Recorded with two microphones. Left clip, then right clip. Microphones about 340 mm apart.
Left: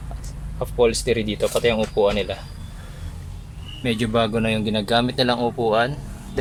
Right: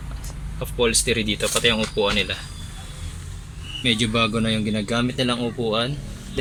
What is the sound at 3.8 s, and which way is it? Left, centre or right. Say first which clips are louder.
Speech: right 1 dB; left.